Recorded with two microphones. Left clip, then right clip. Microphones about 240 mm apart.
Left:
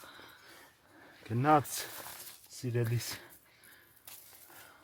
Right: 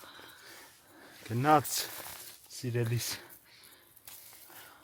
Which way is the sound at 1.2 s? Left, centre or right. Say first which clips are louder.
Right 1 dB; centre.